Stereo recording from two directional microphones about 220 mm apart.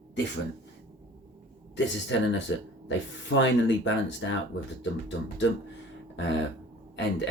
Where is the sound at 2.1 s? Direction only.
55° left (ahead or behind).